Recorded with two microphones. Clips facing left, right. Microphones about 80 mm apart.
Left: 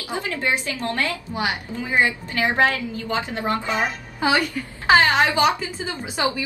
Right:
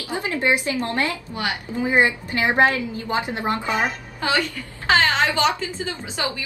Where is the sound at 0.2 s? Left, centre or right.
Right.